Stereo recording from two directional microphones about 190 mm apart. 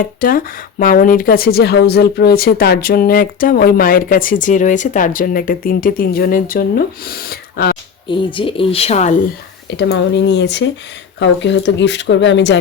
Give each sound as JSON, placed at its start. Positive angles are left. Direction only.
{"t": 0.0, "sound": "speech", "side_deg": 50}
{"t": 8.0, "sound": "speech", "side_deg": 25}
{"t": 9.6, "sound": "speech", "side_deg": 65}